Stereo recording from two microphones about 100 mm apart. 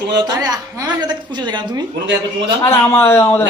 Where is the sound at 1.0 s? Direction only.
45° right (ahead or behind).